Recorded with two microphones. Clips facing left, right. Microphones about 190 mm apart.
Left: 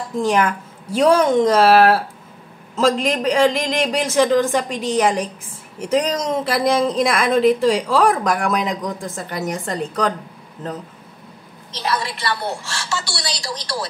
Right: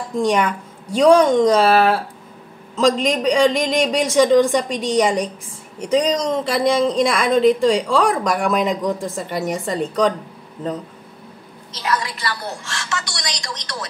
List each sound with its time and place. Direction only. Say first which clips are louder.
0.2 s a woman's voice: even; centre (ahead or behind)
11.8 s a woman's voice: even; 30° left (ahead or behind)